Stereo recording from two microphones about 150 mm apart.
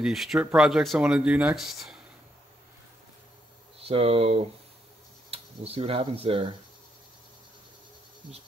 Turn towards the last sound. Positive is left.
turn(degrees=-40)  # may be behind; listen again after turning